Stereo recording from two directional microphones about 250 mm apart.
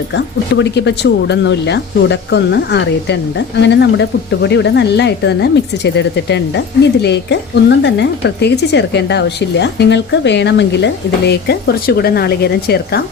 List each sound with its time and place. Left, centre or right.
0.5 s a woman's voice: left